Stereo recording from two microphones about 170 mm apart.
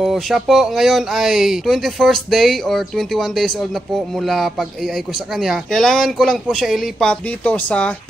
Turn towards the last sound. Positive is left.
turn(degrees=10)  # may be behind; listen again after turning